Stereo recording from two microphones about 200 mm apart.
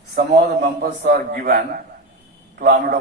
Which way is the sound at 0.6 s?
50° right (ahead or behind).